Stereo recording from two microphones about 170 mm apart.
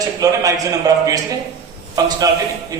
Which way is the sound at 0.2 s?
20° right (ahead or behind).